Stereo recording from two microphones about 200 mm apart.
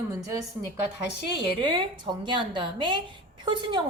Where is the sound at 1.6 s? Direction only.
20° right (ahead or behind).